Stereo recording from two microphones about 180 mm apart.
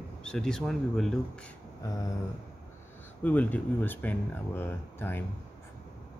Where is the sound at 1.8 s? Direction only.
20° left (ahead or behind).